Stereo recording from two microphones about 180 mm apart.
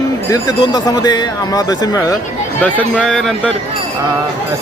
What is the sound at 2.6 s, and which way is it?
Speech, 10° left (ahead or behind).